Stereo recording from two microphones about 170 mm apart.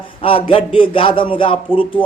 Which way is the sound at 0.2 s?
30° left (ahead or behind).